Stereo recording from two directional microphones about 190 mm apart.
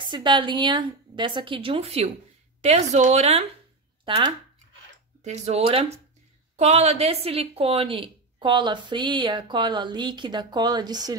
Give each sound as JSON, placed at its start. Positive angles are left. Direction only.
{"t": 0.0, "sound": "a woman's voice", "side_deg": -25}
{"t": 5.2, "sound": "a woman's voice", "side_deg": -35}